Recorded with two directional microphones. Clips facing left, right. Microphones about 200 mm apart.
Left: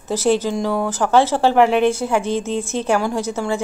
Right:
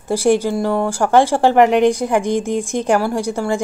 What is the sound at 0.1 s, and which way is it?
Speech, 10° right (ahead or behind).